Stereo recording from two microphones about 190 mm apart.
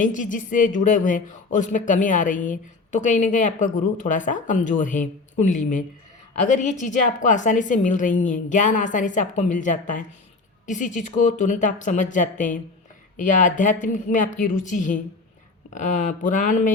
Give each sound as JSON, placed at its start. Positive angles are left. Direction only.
{"t": 0.0, "sound": "a woman's voice", "side_deg": 45}